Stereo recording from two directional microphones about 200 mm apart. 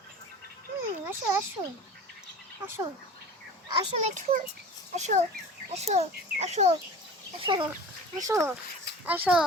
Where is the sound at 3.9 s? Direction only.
35° right (ahead or behind).